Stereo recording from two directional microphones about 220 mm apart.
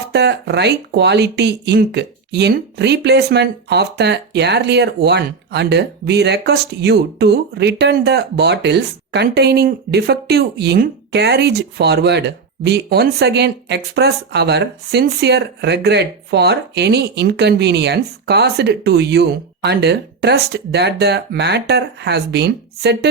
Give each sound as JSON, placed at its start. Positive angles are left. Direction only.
{"t": 0.1, "sound": "speech", "side_deg": -50}